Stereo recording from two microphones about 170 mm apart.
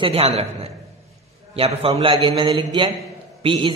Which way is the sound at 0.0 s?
35° right (ahead or behind).